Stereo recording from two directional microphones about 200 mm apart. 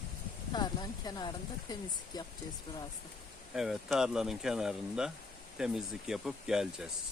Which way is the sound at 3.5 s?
Centre (ahead or behind).